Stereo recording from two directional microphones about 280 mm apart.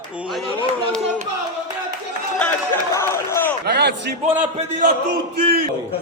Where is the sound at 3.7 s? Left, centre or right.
Right.